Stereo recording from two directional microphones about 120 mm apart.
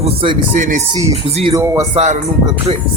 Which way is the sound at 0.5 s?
90° right.